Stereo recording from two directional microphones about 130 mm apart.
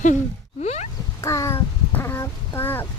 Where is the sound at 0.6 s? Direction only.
55° left (ahead or behind).